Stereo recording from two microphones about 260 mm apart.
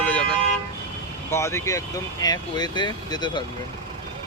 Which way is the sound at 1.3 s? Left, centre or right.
Centre.